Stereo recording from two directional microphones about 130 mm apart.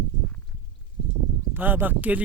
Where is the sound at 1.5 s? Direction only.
15° right (ahead or behind).